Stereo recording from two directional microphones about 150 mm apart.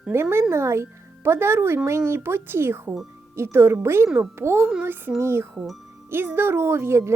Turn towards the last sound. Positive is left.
turn(degrees=-20)  # may be behind; listen again after turning